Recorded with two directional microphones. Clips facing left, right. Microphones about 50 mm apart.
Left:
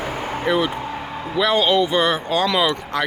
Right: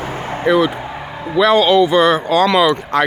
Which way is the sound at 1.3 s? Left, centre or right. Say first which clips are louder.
Right 6 dB; right.